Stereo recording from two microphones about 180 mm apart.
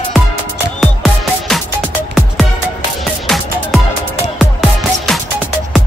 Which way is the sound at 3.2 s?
Centre (ahead or behind).